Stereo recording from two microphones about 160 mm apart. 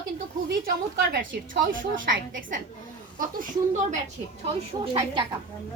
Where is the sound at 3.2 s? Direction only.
60° right (ahead or behind).